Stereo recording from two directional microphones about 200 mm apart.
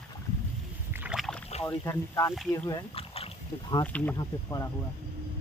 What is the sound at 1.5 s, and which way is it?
Rowboat, 25° left (ahead or behind).